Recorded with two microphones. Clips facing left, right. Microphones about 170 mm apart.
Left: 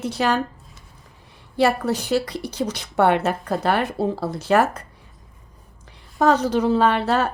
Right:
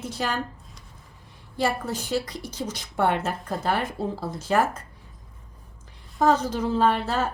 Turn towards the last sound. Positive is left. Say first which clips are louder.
# left 4 dB
turn(degrees=70)  # may be behind; listen again after turning